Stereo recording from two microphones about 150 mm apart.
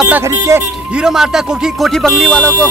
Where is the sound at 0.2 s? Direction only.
20° right (ahead or behind).